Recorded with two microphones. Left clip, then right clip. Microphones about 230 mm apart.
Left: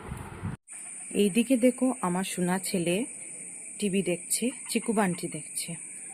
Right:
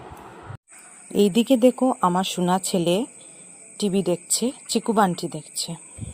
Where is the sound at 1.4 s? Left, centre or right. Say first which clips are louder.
Right 7 dB; right.